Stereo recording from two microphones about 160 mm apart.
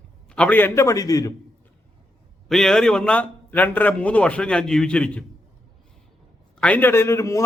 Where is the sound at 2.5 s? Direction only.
5° left (ahead or behind).